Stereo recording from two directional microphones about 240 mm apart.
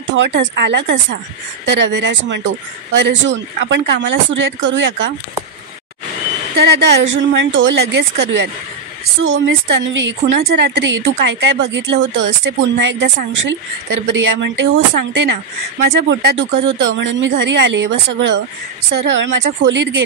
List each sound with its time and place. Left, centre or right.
0.1 s a woman's voice: right
6.5 s a woman's voice: right